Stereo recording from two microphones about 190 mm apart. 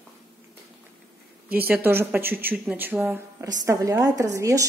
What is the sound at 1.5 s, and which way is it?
A woman's voice, 10° right (ahead or behind).